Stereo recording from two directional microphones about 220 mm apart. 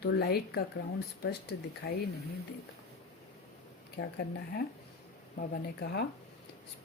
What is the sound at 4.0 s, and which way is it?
Speech, 45° left (ahead or behind).